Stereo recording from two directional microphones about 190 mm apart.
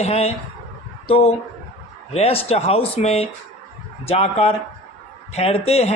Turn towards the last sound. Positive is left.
turn(degrees=35)  # may be behind; listen again after turning